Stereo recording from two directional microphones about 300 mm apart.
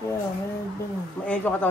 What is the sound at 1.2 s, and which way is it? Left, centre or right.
Speech, centre.